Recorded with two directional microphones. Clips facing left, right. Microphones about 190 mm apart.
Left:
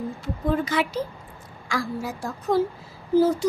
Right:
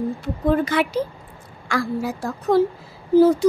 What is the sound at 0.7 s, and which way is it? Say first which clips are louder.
Speech: right 4 dB; 60° right (ahead or behind).